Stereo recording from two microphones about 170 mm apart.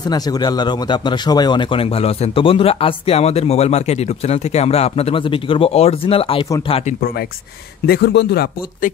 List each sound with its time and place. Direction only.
0.0 s speech: 25° left (ahead or behind); by 7.0 s 40° left (ahead or behind)
7.0 s speech: 65° left (ahead or behind)
7.8 s speech: 75° left (ahead or behind)